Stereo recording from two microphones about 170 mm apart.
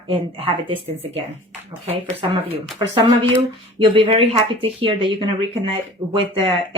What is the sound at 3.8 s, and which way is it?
Speech, 30° right (ahead or behind).